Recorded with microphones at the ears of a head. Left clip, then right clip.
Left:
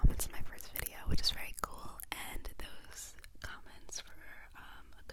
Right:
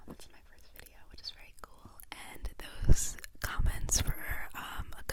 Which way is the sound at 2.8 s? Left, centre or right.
Right.